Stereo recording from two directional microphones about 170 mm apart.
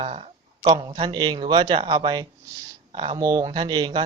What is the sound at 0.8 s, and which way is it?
Speech, 25° right (ahead or behind).